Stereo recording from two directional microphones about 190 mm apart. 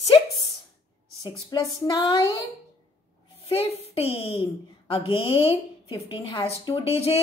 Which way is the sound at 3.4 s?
30° left (ahead or behind).